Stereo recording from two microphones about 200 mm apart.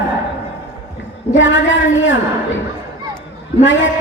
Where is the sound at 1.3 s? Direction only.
70° left (ahead or behind).